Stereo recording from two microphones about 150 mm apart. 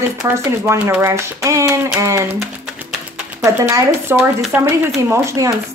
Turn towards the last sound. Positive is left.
turn(degrees=-20)  # may be behind; listen again after turning